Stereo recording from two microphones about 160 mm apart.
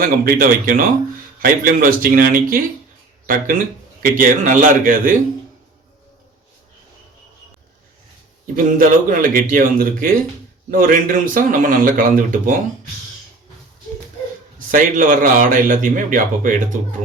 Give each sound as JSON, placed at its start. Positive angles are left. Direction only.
{"t": 0.0, "sound": "a man's voice", "side_deg": -60}
{"t": 8.5, "sound": "a man's voice", "side_deg": -55}
{"t": 14.7, "sound": "a man's voice", "side_deg": -55}